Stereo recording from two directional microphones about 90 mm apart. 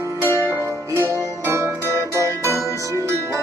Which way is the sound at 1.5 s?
30° right (ahead or behind).